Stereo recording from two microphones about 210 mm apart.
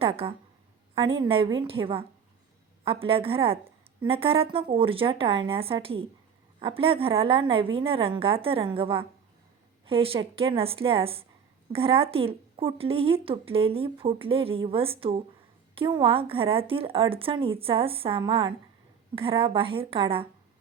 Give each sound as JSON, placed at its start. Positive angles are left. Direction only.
{"t": 0.0, "sound": "speech", "side_deg": -25}